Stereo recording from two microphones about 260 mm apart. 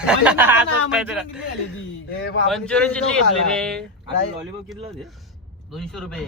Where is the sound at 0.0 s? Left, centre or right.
Centre.